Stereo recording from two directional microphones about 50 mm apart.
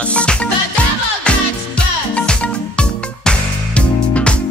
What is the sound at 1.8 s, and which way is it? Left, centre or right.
Music, left.